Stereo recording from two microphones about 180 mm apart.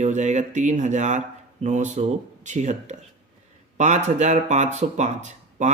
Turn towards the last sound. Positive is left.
turn(degrees=-40)  # may be behind; listen again after turning